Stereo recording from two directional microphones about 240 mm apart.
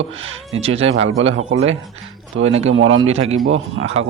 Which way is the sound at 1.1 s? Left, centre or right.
Right.